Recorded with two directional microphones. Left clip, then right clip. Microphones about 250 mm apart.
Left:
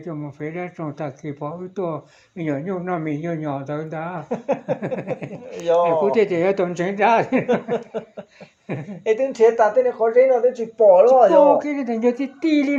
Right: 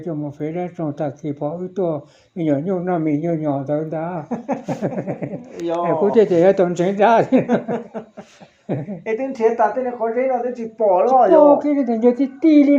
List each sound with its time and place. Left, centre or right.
0.0 s speech: centre
5.6 s speech: left
6.1 s speech: centre
9.0 s speech: left
11.4 s speech: centre